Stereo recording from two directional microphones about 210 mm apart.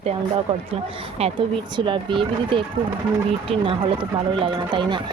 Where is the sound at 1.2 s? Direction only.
20° right (ahead or behind).